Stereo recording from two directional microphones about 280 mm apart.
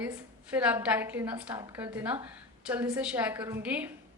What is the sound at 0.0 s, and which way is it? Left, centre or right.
A woman's voice, centre.